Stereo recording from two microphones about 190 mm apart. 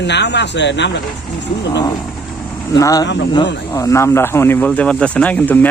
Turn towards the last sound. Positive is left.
turn(degrees=10)  # may be behind; listen again after turning